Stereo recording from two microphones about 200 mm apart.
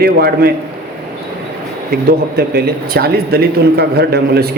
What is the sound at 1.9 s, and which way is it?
Speech, 50° right (ahead or behind).